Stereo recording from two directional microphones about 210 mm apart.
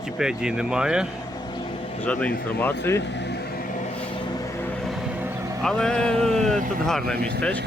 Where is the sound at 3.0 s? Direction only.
55° left (ahead or behind).